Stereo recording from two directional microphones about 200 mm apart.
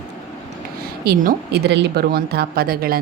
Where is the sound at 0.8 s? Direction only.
45° right (ahead or behind).